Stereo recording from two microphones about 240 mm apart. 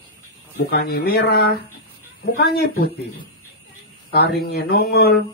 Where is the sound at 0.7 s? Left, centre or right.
Left.